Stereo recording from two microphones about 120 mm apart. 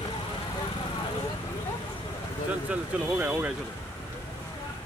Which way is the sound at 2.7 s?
10° right (ahead or behind).